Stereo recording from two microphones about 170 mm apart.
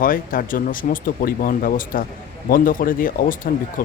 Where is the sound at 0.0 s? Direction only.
55° left (ahead or behind).